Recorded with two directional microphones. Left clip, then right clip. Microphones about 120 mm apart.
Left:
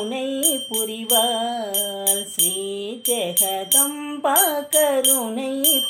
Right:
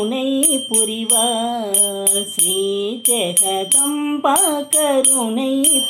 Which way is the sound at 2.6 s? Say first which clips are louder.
Right 8 dB; 15° left (ahead or behind).